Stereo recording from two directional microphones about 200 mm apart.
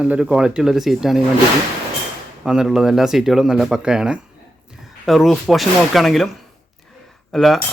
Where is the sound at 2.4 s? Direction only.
Centre (ahead or behind).